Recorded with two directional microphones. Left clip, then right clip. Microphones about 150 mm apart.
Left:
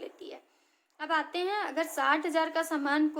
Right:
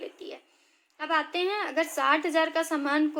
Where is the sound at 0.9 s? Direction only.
40° right (ahead or behind).